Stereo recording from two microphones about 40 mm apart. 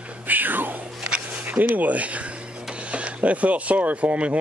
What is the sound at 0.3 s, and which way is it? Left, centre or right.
Music, right.